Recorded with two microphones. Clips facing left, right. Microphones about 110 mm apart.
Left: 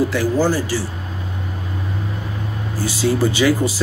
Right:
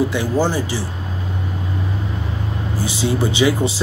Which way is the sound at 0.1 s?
20° right (ahead or behind).